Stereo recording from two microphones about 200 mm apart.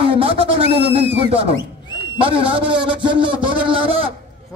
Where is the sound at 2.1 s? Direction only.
25° right (ahead or behind).